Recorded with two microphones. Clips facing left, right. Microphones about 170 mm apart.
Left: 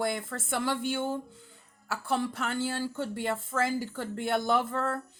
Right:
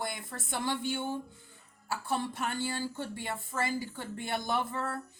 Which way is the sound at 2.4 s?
65° left (ahead or behind).